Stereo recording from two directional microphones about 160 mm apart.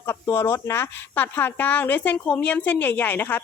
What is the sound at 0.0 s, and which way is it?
Speech, 15° left (ahead or behind).